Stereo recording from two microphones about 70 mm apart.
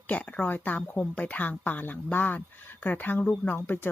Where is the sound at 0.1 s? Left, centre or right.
Left.